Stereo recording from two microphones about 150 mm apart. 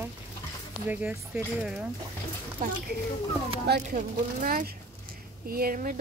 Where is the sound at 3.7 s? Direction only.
70° right (ahead or behind).